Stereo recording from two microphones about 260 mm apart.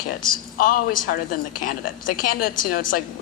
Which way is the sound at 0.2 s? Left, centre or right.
Left.